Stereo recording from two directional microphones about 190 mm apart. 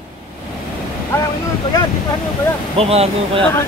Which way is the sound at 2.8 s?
30° right (ahead or behind).